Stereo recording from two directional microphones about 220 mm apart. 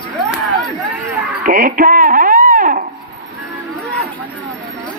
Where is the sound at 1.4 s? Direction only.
40° right (ahead or behind).